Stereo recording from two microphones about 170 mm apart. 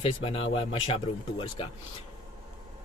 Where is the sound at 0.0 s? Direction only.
35° left (ahead or behind).